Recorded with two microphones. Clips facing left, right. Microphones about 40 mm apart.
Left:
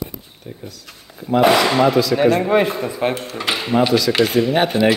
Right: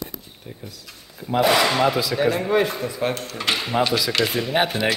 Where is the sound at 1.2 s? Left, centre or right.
Centre.